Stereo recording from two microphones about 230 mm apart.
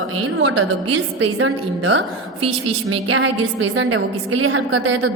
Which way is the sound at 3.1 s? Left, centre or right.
Right.